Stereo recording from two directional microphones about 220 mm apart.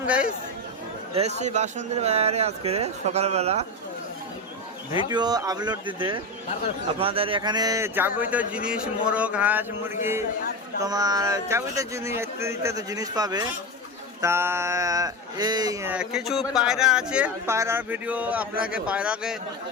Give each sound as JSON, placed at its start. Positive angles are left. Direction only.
{"t": 1.4, "sound": "speech", "side_deg": -30}
{"t": 5.0, "sound": "speech", "side_deg": -15}